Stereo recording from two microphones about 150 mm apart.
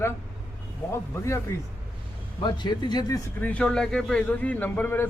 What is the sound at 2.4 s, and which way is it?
Speech, 30° left (ahead or behind).